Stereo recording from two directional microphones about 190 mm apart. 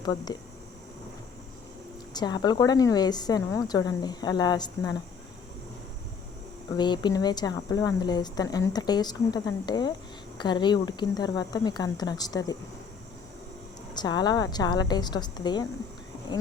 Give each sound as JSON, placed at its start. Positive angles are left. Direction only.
{"t": 0.0, "sound": "speech", "side_deg": 20}
{"t": 2.1, "sound": "speech", "side_deg": 20}
{"t": 6.7, "sound": "speech", "side_deg": 25}
{"t": 13.9, "sound": "speech", "side_deg": 20}